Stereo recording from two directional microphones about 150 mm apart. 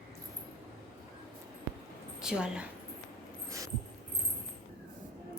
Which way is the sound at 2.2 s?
5° right (ahead or behind).